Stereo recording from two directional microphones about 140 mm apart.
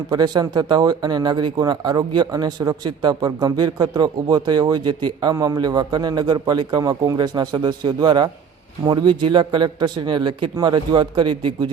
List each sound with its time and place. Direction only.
0.1 s speech: 30° right (ahead or behind)